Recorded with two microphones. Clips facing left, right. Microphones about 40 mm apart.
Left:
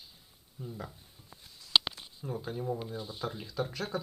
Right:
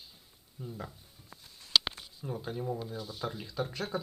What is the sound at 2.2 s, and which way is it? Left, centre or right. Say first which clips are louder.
Speech: even; centre.